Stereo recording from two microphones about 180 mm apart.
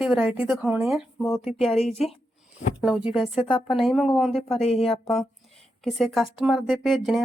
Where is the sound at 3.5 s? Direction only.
30° left (ahead or behind).